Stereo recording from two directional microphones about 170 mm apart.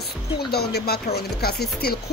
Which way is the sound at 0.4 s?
70° left (ahead or behind).